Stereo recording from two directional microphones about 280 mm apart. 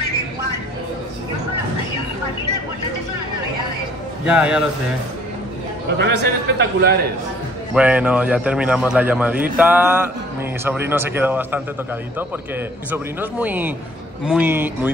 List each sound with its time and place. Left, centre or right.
4.3 s a man's voice: centre
5.9 s a man's voice: right
7.7 s a man's voice: centre